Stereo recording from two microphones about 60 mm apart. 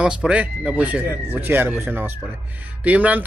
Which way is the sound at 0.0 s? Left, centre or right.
Centre.